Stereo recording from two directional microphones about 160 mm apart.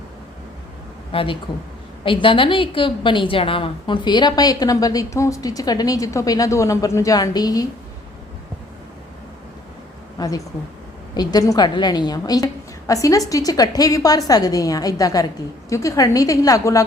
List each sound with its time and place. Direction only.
1.1 s a woman's voice: 35° left (ahead or behind)
10.2 s a woman's voice: 20° left (ahead or behind)